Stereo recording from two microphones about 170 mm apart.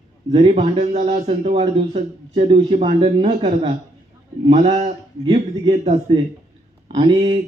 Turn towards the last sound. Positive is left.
turn(degrees=-35)  # may be behind; listen again after turning